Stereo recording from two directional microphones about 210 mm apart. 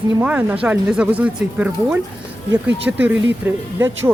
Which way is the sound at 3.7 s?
10° right (ahead or behind).